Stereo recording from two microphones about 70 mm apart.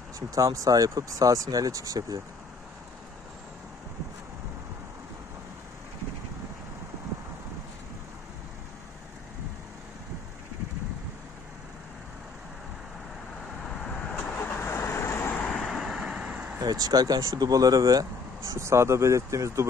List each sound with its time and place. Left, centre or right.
0.3 s speech: right
13.8 s vehicle: centre
14.4 s vehicle: left
15.4 s vehicle: centre
15.7 s vehicle: centre
16.0 s vehicle: centre
16.5 s speech: right
18.5 s speech: right